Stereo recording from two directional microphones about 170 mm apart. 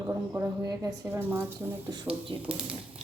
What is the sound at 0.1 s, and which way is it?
Speech, 15° right (ahead or behind).